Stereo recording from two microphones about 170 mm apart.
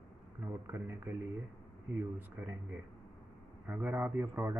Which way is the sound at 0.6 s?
15° right (ahead or behind).